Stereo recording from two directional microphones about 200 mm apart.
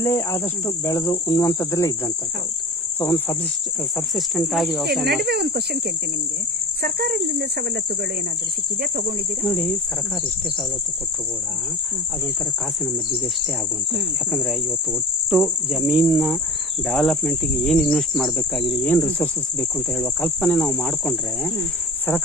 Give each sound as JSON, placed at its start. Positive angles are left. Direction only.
{"t": 0.0, "sound": "speech", "side_deg": 15}
{"t": 3.0, "sound": "speech", "side_deg": 10}
{"t": 3.9, "sound": "cricket", "side_deg": 0}
{"t": 5.2, "sound": "cricket", "side_deg": -55}
{"t": 6.8, "sound": "cricket", "side_deg": -50}
{"t": 8.8, "sound": "cricket", "side_deg": -50}
{"t": 14.3, "sound": "cricket", "side_deg": 0}